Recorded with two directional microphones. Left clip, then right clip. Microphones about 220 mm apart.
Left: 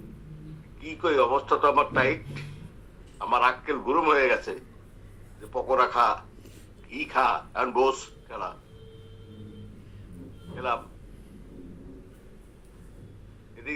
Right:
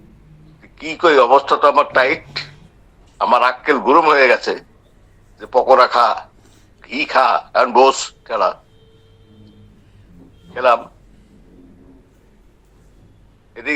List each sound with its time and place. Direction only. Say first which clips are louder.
0.8 s a man's voice: right 12 dB; 45° right (ahead or behind)
10.5 s a man's voice: right 16 dB; 50° right (ahead or behind)